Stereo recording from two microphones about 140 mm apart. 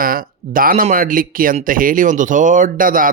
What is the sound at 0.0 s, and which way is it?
Speech, 90° right.